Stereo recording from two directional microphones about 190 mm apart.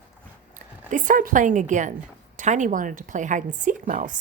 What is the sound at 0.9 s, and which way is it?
A woman's voice, 45° right (ahead or behind).